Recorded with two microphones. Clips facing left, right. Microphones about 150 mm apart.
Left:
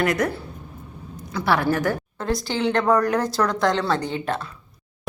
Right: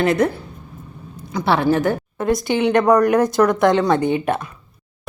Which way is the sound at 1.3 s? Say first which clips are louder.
Right 4 dB; 20° right (ahead or behind).